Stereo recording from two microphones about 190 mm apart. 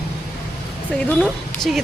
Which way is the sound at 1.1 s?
5° left (ahead or behind).